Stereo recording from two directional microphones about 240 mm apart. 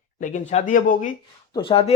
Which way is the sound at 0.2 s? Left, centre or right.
Left.